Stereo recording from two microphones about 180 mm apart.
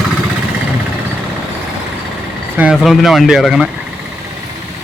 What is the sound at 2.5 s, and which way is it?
Speech, 5° right (ahead or behind).